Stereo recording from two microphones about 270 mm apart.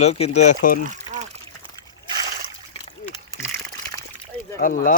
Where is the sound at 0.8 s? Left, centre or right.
Right.